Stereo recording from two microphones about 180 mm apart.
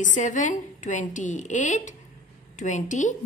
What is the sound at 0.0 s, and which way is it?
A woman's voice, 45° left (ahead or behind).